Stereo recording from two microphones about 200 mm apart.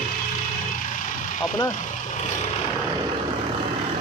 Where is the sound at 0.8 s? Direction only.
40° left (ahead or behind).